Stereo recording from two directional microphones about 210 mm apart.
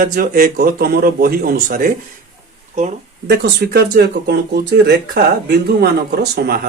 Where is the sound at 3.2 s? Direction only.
50° right (ahead or behind).